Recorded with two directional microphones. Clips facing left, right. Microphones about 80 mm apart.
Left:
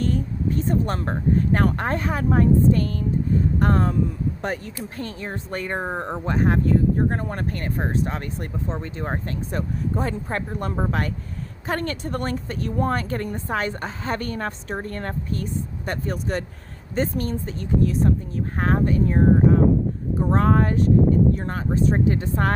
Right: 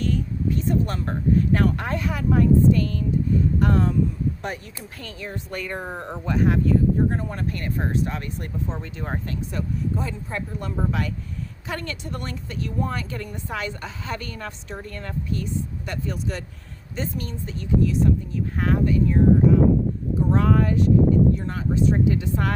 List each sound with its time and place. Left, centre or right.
0.0 s a woman's voice: left